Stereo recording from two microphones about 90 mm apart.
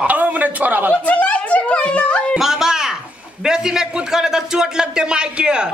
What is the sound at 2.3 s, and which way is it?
A man's voice, 5° right (ahead or behind).